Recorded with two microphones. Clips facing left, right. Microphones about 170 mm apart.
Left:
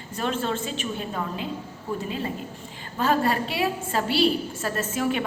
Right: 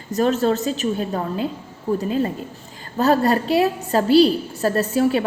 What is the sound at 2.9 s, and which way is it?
A woman's voice, 40° right (ahead or behind).